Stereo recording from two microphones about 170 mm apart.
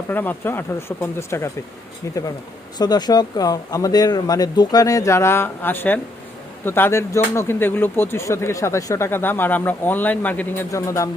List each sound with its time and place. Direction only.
0.1 s speech: 10° left (ahead or behind)
2.7 s speech: 25° left (ahead or behind)